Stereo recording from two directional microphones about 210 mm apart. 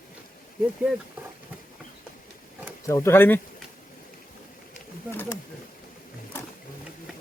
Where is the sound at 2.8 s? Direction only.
15° left (ahead or behind).